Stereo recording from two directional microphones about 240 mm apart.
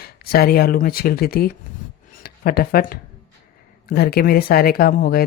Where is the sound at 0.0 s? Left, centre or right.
Left.